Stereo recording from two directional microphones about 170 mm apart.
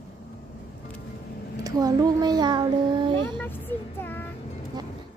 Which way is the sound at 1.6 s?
20° right (ahead or behind).